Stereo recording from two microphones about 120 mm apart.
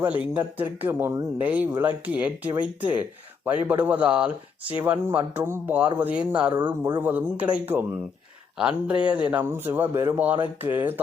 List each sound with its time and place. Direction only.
0.0 s speech: 15° right (ahead or behind)